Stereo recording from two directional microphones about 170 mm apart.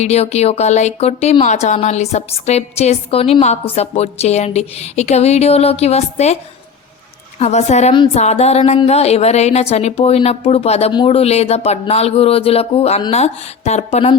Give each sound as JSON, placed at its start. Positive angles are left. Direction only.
{"t": 0.0, "sound": "speech", "side_deg": 40}
{"t": 7.3, "sound": "speech", "side_deg": 40}